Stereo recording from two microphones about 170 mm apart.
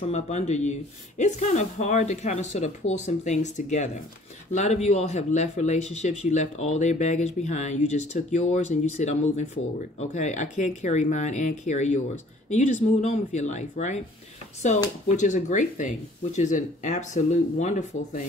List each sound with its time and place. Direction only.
0.0 s speech: 40° left (ahead or behind)
15.0 s speech: 45° left (ahead or behind)